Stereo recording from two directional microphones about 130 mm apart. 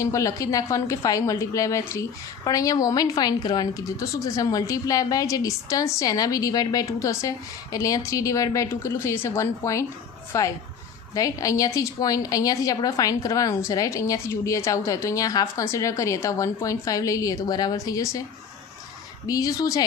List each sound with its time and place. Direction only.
0.0 s a woman's voice: 25° left (ahead or behind)
19.3 s a woman's voice: 25° left (ahead or behind)